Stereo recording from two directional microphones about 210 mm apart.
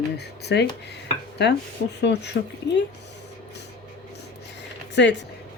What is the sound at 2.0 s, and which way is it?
Speech, 55° left (ahead or behind).